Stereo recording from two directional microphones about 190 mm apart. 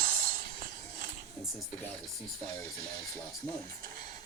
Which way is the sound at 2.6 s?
15° left (ahead or behind).